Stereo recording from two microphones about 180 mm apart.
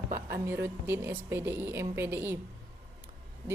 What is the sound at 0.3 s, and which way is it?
A woman's voice, 15° right (ahead or behind).